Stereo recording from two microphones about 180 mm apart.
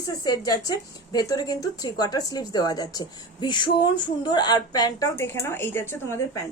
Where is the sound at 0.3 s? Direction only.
20° left (ahead or behind).